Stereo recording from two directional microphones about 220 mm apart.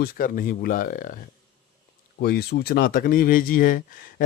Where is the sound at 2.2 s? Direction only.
45° left (ahead or behind).